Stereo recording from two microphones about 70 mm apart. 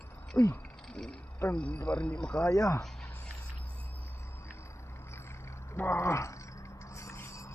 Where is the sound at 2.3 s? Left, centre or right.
Left.